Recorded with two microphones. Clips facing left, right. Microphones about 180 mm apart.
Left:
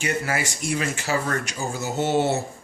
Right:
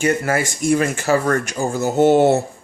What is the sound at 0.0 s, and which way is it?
Speech, 50° right (ahead or behind).